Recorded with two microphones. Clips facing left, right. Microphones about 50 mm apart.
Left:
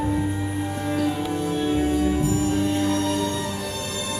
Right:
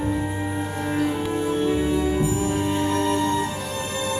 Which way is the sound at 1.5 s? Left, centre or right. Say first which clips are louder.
Even; right.